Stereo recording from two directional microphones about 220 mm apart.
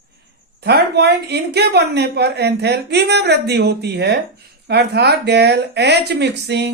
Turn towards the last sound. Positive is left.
turn(degrees=-50)  # may be behind; listen again after turning